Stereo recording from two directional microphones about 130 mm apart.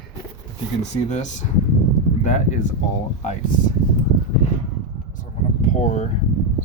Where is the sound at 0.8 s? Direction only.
65° left (ahead or behind).